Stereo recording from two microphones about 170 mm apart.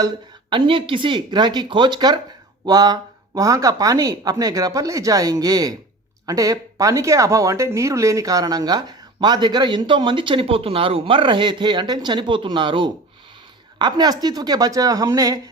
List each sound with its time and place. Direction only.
0.5 s speech: 30° right (ahead or behind)